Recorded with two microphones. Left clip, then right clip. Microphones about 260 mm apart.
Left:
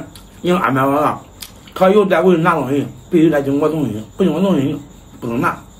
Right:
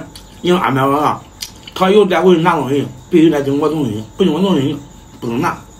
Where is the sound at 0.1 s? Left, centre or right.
Centre.